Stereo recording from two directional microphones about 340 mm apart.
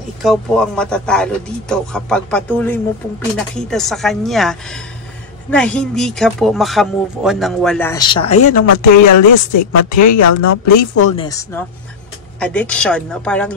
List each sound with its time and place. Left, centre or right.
0.2 s speech: centre
8.5 s speech: left
11.1 s speech: centre